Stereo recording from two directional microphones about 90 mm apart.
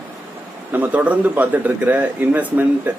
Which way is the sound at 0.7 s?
20° right (ahead or behind).